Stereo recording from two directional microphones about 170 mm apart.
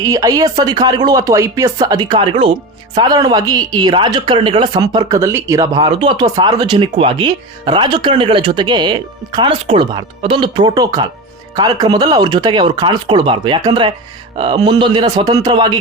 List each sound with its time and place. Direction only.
0.0 s speech: 20° right (ahead or behind)